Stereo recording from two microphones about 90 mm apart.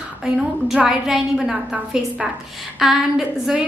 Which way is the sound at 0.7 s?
5° right (ahead or behind).